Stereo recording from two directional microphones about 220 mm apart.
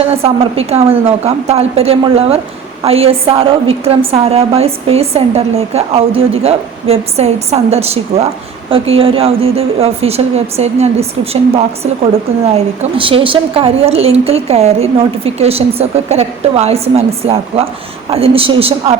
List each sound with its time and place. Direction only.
0.1 s a woman's voice: 25° right (ahead or behind)